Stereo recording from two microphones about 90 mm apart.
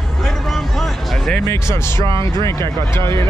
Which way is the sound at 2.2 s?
35° left (ahead or behind).